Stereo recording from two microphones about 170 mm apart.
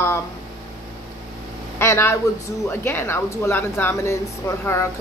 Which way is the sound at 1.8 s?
15° left (ahead or behind).